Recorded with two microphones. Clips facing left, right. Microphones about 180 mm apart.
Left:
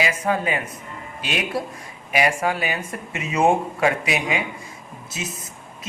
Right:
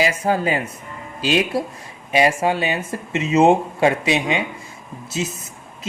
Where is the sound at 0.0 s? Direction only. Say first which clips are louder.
Right 3 dB; 35° right (ahead or behind).